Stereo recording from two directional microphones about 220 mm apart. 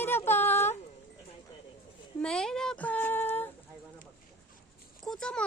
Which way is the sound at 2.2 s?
5° left (ahead or behind).